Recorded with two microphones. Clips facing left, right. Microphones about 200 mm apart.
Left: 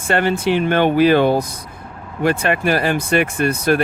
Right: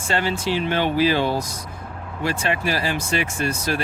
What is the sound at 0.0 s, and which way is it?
Speech, 55° left (ahead or behind).